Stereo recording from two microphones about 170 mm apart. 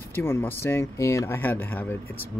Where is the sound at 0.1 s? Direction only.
10° left (ahead or behind).